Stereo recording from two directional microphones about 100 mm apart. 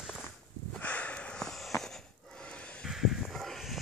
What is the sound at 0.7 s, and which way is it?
Sniff, 15° left (ahead or behind).